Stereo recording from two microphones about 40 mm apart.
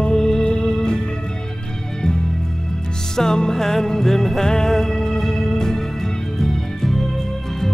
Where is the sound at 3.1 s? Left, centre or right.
Centre.